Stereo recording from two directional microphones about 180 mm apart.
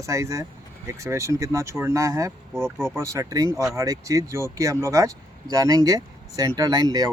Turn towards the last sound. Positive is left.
turn(degrees=-20)  # may be behind; listen again after turning